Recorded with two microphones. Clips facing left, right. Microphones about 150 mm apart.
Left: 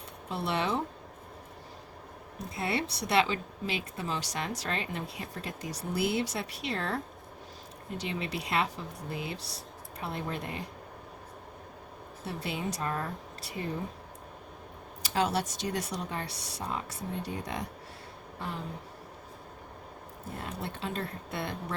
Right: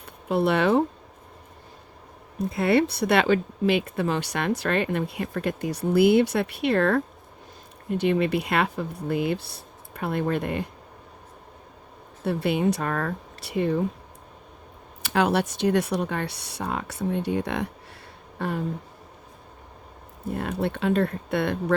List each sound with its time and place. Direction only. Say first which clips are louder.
0.0 s speech: right 12 dB; 60° right (ahead or behind)
2.5 s speech: right 11 dB; 60° right (ahead or behind)
12.2 s speech: right 12 dB; 60° right (ahead or behind)
15.0 s speech: right 7 dB; 65° right (ahead or behind)
18.3 s a sound: right 10 dB; 60° right (ahead or behind)
20.4 s speech: right 11 dB; 65° right (ahead or behind)